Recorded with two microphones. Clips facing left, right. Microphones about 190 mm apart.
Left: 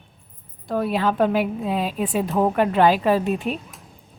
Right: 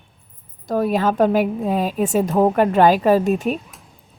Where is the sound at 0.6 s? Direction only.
40° right (ahead or behind).